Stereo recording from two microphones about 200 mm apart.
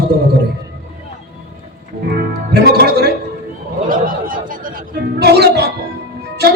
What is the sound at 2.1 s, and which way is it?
Speech, 50° right (ahead or behind).